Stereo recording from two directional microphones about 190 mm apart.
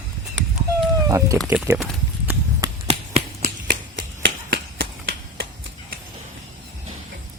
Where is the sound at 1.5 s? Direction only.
15° right (ahead or behind).